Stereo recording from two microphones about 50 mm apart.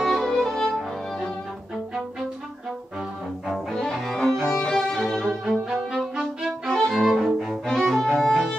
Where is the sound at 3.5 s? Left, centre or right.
Centre.